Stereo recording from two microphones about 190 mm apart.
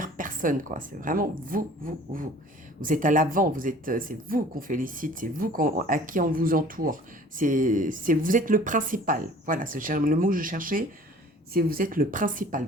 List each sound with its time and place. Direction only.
0.0 s speech: 45° right (ahead or behind)